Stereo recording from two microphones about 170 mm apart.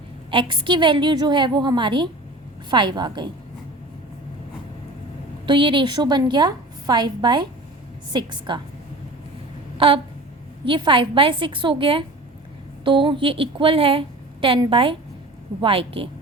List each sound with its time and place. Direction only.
0.3 s a woman's voice: 30° right (ahead or behind)
5.5 s a woman's voice: 30° right (ahead or behind)
9.7 s a sound: 30° right (ahead or behind)
10.7 s a woman's voice: 30° right (ahead or behind)